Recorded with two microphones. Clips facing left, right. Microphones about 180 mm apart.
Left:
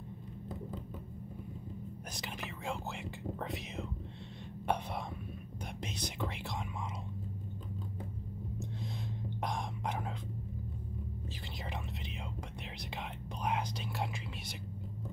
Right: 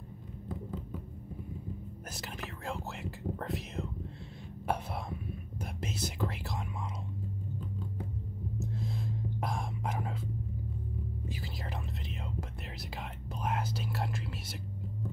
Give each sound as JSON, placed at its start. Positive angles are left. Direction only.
{"t": 2.1, "sound": "whispering", "side_deg": 0}
{"t": 8.5, "sound": "whispering", "side_deg": 0}
{"t": 12.9, "sound": "whispering", "side_deg": -5}